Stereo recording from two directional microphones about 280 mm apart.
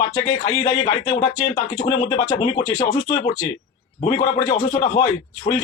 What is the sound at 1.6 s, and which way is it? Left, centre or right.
A man's voice, centre.